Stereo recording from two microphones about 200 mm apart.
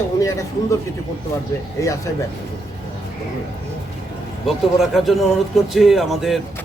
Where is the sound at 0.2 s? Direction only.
15° left (ahead or behind).